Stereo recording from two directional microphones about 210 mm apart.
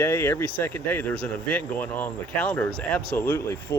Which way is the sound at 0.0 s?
10° left (ahead or behind).